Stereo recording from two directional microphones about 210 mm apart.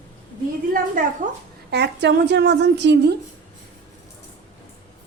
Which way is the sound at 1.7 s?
55° right (ahead or behind).